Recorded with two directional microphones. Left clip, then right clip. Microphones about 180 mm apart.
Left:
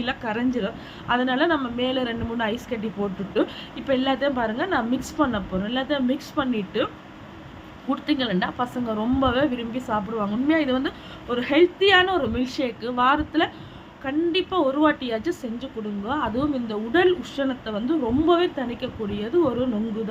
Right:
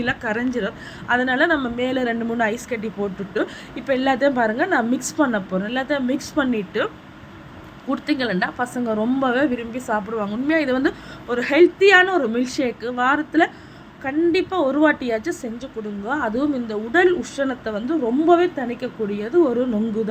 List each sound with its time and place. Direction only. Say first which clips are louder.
0.0 s a woman's voice: right 3 dB; 15° right (ahead or behind)